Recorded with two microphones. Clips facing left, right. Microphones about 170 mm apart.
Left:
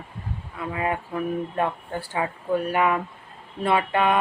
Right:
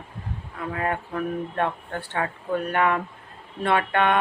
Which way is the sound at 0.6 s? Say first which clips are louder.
Left 1 dB; 10° left (ahead or behind).